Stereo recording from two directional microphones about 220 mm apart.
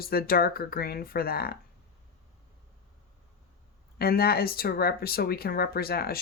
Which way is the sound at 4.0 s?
45° left (ahead or behind).